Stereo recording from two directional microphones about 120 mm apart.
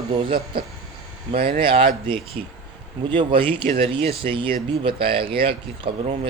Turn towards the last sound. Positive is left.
turn(degrees=-45)  # may be behind; listen again after turning